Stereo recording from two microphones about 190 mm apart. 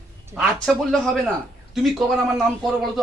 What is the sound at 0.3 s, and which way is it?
A man's voice, centre (ahead or behind).